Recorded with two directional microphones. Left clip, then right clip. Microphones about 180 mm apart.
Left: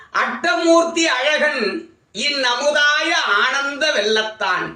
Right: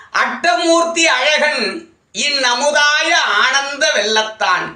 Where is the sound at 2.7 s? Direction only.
20° left (ahead or behind).